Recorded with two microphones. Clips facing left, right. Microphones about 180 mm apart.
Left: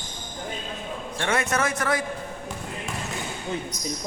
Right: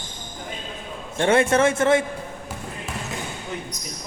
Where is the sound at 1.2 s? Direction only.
30° right (ahead or behind).